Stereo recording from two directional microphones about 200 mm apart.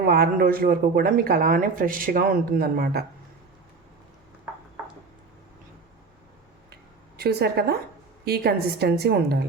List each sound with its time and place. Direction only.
0.1 s speech: 45° right (ahead or behind)
7.2 s a woman's voice: 55° right (ahead or behind)